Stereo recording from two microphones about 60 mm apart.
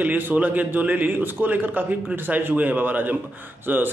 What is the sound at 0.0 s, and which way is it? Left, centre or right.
A man's voice, right.